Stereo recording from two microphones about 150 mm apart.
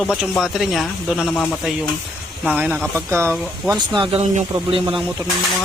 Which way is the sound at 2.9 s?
15° right (ahead or behind).